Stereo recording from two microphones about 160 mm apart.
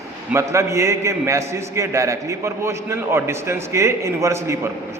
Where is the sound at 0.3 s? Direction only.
20° right (ahead or behind).